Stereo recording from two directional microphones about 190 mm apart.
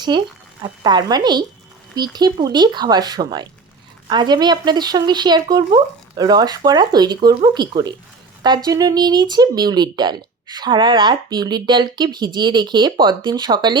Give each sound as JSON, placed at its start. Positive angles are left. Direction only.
{"t": 0.1, "sound": "speech", "side_deg": -25}